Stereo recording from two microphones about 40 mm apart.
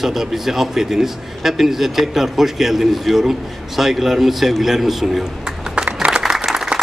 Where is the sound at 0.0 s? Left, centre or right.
Centre.